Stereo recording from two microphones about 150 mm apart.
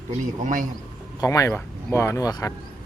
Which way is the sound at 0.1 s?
60° right (ahead or behind).